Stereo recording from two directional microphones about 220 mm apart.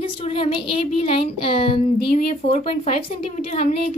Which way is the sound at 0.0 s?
25° left (ahead or behind).